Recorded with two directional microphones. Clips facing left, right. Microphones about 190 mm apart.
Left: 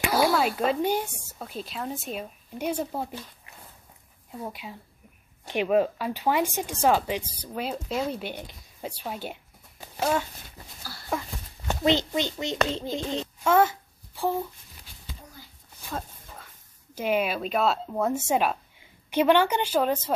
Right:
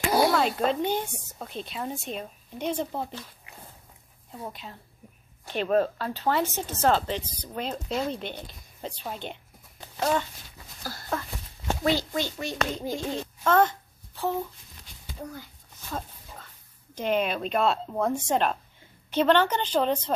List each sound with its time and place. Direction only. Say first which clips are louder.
0.6 s a woman's voice: left 1 dB; 5° left (ahead or behind)
4.4 s speech: left 2 dB; 10° left (ahead or behind)
10.8 s a sound: right 6 dB; 45° right (ahead or behind)
11.8 s speech: left 3 dB; 20° left (ahead or behind)
13.4 s a sound: left 1 dB; 10° left (ahead or behind)
16.9 s speech: even; 10° left (ahead or behind)